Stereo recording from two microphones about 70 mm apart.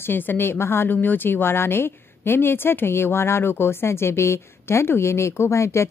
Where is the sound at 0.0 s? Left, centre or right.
Left.